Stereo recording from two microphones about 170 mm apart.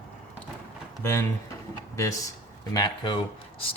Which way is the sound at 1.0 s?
15° left (ahead or behind).